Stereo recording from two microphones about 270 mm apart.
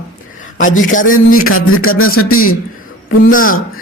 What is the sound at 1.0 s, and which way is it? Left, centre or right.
Speech, left.